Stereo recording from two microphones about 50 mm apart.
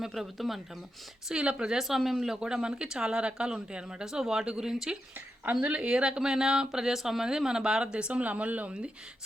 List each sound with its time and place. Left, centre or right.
0.0 s speech: centre
1.3 s speech: centre
5.6 s speech: centre